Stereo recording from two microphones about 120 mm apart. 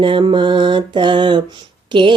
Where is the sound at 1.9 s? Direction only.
40° right (ahead or behind).